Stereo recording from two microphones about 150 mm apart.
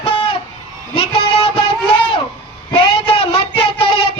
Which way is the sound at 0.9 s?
40° left (ahead or behind).